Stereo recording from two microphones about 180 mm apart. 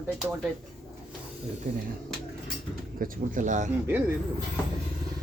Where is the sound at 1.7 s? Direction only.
50° right (ahead or behind).